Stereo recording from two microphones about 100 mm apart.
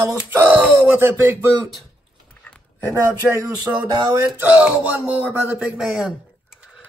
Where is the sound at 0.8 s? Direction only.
20° right (ahead or behind).